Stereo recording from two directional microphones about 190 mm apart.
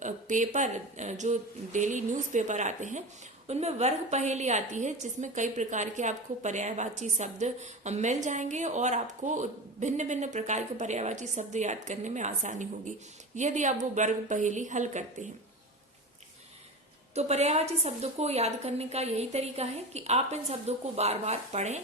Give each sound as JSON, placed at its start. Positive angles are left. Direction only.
{"t": 0.0, "sound": "a woman's voice", "side_deg": -40}
{"t": 17.2, "sound": "a woman's voice", "side_deg": -35}